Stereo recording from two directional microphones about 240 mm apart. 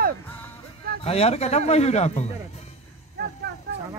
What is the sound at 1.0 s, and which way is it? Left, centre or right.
Speech, left.